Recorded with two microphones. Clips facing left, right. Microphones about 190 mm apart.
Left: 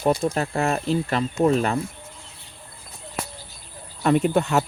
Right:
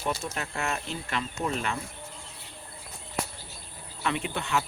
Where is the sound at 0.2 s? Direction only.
35° left (ahead or behind).